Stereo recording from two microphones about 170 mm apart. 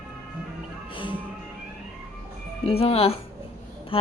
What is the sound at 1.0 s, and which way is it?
Music, 30° left (ahead or behind).